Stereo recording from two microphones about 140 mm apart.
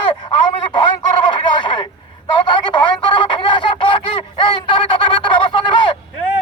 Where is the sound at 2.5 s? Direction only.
35° left (ahead or behind).